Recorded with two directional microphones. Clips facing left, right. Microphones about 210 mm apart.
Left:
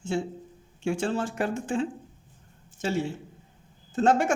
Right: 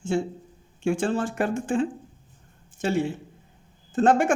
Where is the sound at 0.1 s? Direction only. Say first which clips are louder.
Right 3 dB; 50° right (ahead or behind).